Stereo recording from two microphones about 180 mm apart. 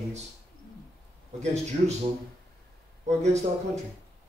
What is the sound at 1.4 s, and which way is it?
Speech, 40° right (ahead or behind).